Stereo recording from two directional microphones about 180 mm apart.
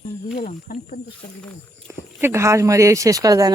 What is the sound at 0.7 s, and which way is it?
Speech, 55° left (ahead or behind).